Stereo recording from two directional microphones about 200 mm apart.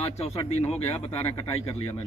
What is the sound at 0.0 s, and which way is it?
Speech, 30° left (ahead or behind).